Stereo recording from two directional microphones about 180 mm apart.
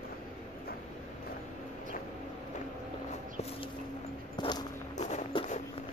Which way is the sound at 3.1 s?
35° left (ahead or behind).